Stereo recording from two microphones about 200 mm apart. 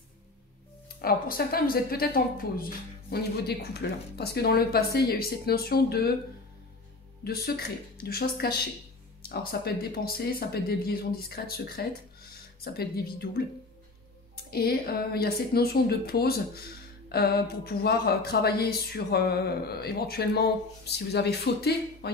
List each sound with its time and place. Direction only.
1.0 s a woman's voice: 50° left (ahead or behind)
7.2 s a woman's voice: 50° left (ahead or behind)
14.5 s a woman's voice: 50° left (ahead or behind)